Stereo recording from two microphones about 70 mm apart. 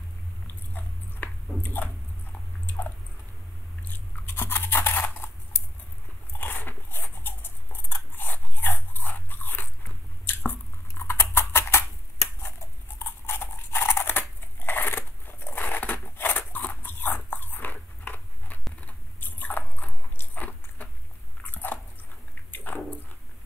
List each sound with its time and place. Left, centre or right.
0.7 s biting: left
3.9 s scissors: left
6.3 s dog: left
12.4 s a sound: left
18.8 s biting: left
22.5 s a sound: left